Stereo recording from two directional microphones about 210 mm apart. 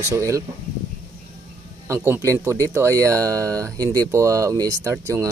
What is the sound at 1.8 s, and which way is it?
Speech, 10° right (ahead or behind).